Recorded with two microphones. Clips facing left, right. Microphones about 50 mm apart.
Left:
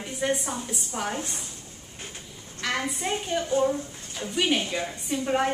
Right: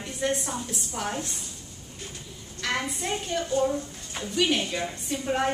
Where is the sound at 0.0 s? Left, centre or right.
Centre.